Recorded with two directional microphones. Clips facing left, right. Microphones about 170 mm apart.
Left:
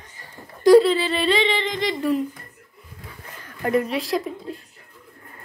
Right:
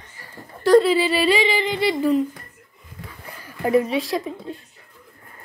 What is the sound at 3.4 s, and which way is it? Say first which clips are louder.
A woman's voice: right 3 dB; 5° right (ahead or behind).